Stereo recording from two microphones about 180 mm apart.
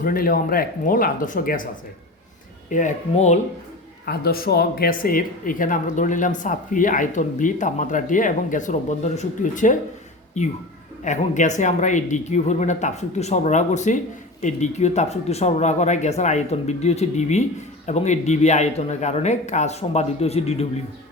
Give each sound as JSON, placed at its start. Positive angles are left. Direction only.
{"t": 0.0, "sound": "speech", "side_deg": 50}
{"t": 2.6, "sound": "speech", "side_deg": 45}
{"t": 4.0, "sound": "speech", "side_deg": 60}